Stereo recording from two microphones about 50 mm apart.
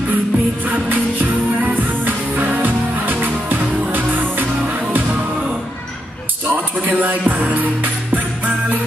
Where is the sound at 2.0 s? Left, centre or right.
Right.